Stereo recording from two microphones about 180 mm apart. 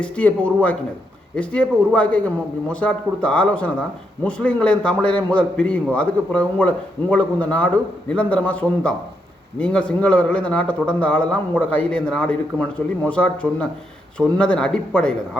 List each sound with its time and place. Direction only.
0.0 s a man's voice: 5° left (ahead or behind)